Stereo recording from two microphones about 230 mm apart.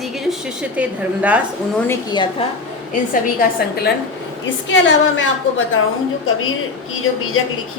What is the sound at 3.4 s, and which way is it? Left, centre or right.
Speech, left.